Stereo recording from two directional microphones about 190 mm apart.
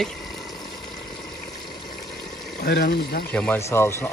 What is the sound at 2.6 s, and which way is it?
Speech, 55° left (ahead or behind).